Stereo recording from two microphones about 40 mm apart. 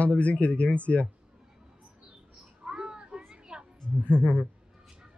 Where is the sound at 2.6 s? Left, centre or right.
Centre.